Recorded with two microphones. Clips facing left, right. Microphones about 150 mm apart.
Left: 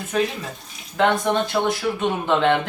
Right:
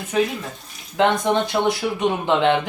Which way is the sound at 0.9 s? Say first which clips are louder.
Right 1 dB; 15° right (ahead or behind).